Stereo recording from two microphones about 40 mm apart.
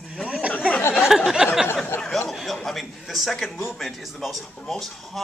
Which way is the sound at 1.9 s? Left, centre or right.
Left.